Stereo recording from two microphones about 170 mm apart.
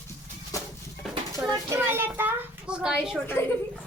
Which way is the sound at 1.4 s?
20° right (ahead or behind).